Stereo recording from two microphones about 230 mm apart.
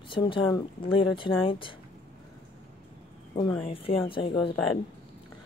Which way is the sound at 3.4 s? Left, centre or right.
Centre.